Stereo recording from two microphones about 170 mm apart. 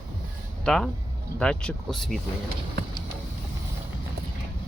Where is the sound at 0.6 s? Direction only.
5° left (ahead or behind).